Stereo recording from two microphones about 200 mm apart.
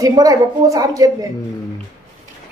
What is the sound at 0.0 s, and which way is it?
A woman's voice, 15° right (ahead or behind).